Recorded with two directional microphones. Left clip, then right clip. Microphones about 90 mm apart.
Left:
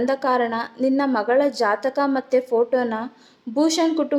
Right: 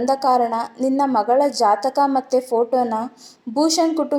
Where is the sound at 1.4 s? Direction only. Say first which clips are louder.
Right 2 dB; 35° left (ahead or behind).